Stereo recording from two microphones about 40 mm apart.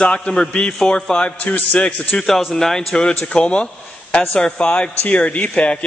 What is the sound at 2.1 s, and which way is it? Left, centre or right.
Speech, centre.